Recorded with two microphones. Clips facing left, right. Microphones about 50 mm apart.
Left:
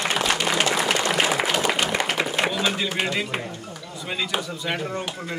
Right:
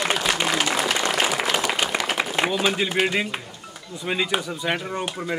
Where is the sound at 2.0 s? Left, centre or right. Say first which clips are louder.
Even; centre.